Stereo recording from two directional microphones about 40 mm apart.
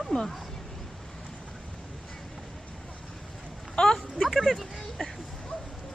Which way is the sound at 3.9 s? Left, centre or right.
Centre.